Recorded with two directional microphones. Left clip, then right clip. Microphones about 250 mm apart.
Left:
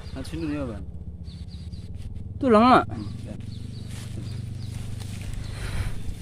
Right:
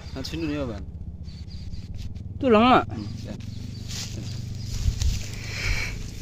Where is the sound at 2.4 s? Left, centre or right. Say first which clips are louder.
Left 1 dB; centre.